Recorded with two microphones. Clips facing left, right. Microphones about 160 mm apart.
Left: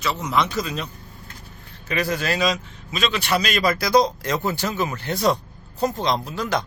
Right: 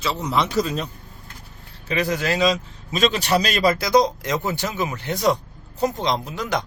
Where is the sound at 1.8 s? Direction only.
20° right (ahead or behind).